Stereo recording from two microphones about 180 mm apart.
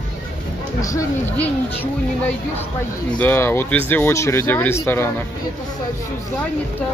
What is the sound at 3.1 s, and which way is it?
Speech, 10° left (ahead or behind).